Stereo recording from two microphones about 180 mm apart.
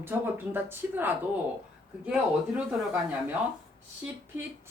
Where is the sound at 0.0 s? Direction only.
10° right (ahead or behind).